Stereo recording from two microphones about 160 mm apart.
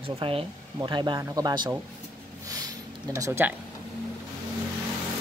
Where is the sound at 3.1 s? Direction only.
15° right (ahead or behind).